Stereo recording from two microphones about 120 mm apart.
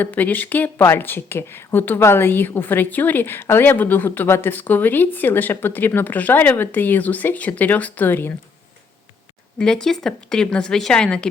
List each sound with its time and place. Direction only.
0.0 s a woman's voice: 15° left (ahead or behind)
9.6 s a woman's voice: 5° left (ahead or behind)